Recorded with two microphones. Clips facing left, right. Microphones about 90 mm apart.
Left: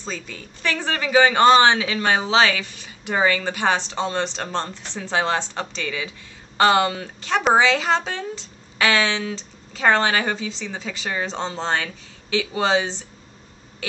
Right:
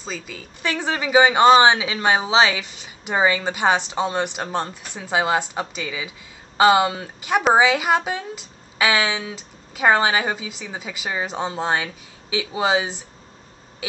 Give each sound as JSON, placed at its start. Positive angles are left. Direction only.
{"t": 0.0, "sound": "a woman's voice", "side_deg": -5}
{"t": 0.6, "sound": "speech", "side_deg": -15}